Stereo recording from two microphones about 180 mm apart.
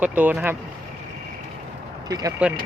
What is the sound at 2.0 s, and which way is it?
Speech, 20° right (ahead or behind).